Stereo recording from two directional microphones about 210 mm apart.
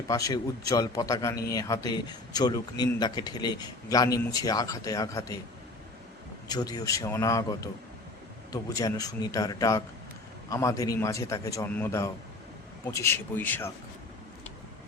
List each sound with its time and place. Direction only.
0.1 s a man's voice: 15° left (ahead or behind)
6.5 s a man's voice: 20° left (ahead or behind)
8.7 s a man's voice: 15° left (ahead or behind)